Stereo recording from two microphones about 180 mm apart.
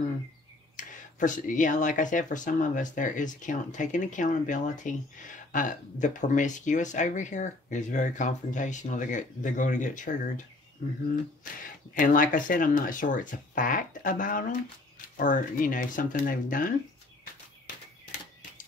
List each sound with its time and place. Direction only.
0.7 s speech: 45° left (ahead or behind)
11.9 s speech: 45° left (ahead or behind)